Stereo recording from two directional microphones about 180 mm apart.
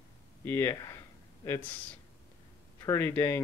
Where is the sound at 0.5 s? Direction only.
15° left (ahead or behind).